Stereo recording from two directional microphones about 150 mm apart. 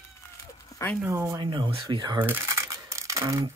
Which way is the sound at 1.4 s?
35° right (ahead or behind).